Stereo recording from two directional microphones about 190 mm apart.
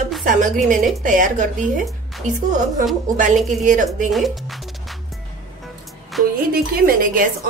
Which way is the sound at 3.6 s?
40° right (ahead or behind).